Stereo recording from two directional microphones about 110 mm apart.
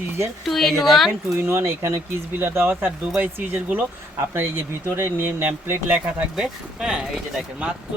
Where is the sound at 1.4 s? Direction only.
20° right (ahead or behind).